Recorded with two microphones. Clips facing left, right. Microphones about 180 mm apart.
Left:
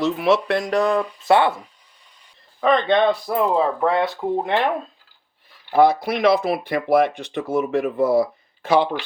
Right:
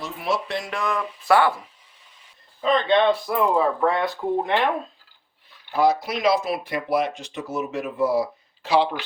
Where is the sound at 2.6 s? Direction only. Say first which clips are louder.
Left 2 dB; 60° left (ahead or behind).